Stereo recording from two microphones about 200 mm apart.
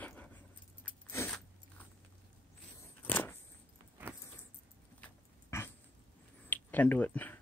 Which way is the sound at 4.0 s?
10° right (ahead or behind).